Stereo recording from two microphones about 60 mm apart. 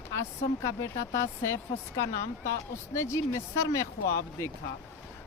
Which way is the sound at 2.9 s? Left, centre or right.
Left.